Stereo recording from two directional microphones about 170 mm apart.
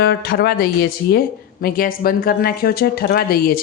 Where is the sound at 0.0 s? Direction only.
70° left (ahead or behind).